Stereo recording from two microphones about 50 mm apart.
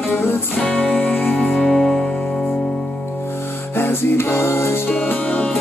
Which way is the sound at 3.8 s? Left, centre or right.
Left.